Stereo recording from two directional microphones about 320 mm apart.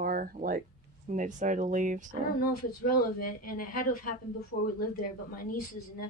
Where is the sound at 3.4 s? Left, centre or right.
Left.